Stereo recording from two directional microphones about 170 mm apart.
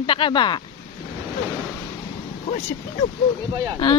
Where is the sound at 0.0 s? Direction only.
30° left (ahead or behind).